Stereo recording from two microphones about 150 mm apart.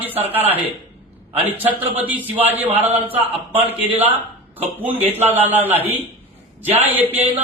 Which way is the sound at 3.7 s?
10° right (ahead or behind).